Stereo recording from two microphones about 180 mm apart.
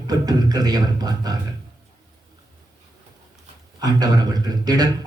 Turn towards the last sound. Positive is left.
turn(degrees=-20)  # may be behind; listen again after turning